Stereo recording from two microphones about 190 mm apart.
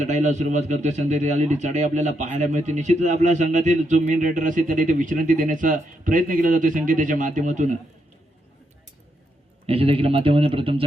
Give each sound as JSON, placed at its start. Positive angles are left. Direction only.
{"t": 0.0, "sound": "speech", "side_deg": -40}
{"t": 9.6, "sound": "speech", "side_deg": -30}